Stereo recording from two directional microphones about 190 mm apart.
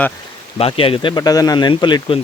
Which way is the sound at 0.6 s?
30° left (ahead or behind).